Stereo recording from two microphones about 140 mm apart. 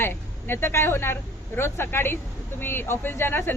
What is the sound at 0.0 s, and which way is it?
Speech, 15° left (ahead or behind).